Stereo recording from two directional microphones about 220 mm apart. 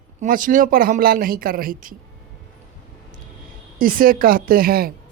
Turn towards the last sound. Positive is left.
turn(degrees=-40)  # may be behind; listen again after turning